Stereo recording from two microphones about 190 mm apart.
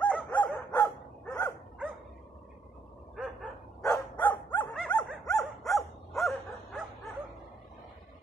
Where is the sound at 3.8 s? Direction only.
20° left (ahead or behind).